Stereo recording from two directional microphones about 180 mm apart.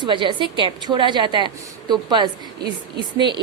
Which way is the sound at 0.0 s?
25° right (ahead or behind).